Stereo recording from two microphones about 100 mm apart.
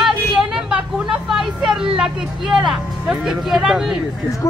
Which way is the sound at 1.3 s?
5° right (ahead or behind).